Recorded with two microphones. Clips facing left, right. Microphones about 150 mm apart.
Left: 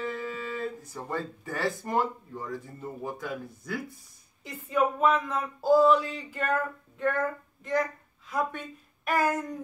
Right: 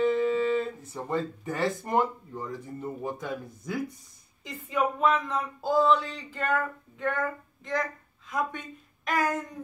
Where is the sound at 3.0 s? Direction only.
20° right (ahead or behind).